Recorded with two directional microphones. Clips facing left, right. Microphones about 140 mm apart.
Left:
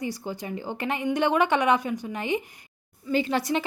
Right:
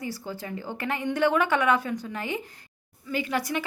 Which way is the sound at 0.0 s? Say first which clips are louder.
Left 3 dB; 20° left (ahead or behind).